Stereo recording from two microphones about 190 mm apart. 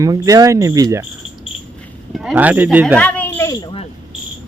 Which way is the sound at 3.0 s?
10° left (ahead or behind).